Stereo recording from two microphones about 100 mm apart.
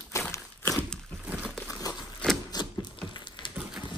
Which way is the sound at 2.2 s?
10° left (ahead or behind).